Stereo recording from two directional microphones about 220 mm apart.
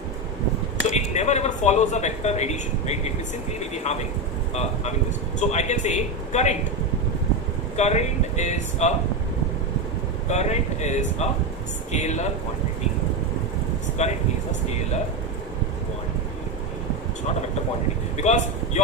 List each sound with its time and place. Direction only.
0.9 s speech: 30° left (ahead or behind)
7.8 s speech: 30° left (ahead or behind)
10.2 s speech: 30° left (ahead or behind)
14.0 s speech: 30° left (ahead or behind)
18.2 s speech: 30° left (ahead or behind)